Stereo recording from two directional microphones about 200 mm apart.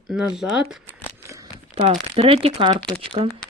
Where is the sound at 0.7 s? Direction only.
10° right (ahead or behind).